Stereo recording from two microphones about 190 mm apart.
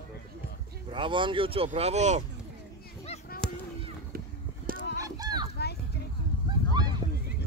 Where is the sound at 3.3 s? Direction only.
50° left (ahead or behind).